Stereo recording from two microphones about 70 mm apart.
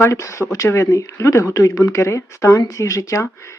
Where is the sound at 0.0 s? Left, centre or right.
Left.